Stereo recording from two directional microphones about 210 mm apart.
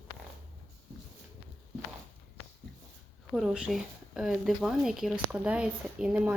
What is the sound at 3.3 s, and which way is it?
Speech, 5° right (ahead or behind).